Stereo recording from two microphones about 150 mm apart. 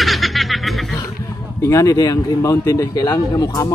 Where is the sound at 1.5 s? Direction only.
20° left (ahead or behind).